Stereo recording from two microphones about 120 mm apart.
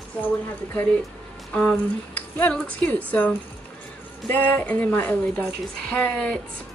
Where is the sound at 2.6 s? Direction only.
10° left (ahead or behind).